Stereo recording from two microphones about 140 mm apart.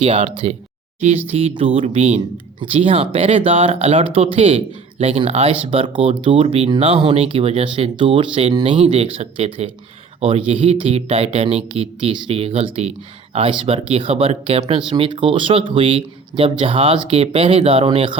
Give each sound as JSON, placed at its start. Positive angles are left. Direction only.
{"t": 0.0, "sound": "speech", "side_deg": -45}